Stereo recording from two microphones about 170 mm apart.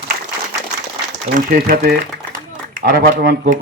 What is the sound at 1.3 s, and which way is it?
A man's voice, 55° right (ahead or behind).